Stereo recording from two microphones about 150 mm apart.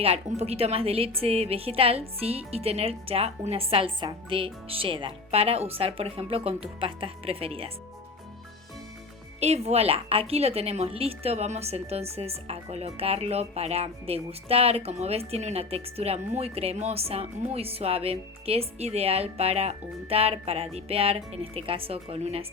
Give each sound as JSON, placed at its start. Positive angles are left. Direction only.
{"t": 0.0, "sound": "a woman's voice", "side_deg": -45}
{"t": 9.4, "sound": "a woman's voice", "side_deg": -45}